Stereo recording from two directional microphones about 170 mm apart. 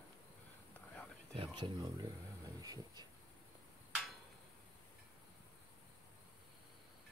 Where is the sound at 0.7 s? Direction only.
10° left (ahead or behind).